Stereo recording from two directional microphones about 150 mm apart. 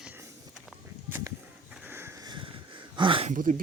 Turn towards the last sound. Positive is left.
turn(degrees=-60)  # may be behind; listen again after turning